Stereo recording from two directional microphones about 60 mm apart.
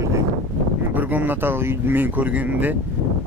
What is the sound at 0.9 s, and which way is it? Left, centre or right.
Speech, right.